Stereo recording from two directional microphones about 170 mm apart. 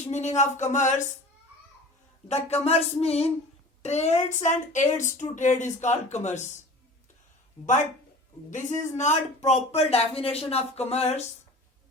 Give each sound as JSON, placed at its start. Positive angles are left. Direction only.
{"t": 0.1, "sound": "speech", "side_deg": 45}
{"t": 2.2, "sound": "speech", "side_deg": 40}
{"t": 8.9, "sound": "speech", "side_deg": 45}